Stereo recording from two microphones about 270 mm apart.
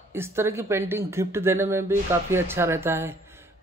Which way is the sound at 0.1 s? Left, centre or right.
Centre.